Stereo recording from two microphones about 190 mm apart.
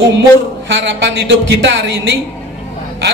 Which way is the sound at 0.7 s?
70° right (ahead or behind).